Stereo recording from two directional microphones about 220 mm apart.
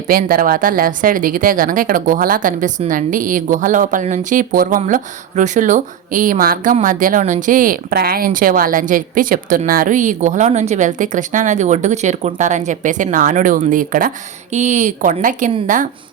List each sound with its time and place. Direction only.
0.1 s speech: 40° right (ahead or behind)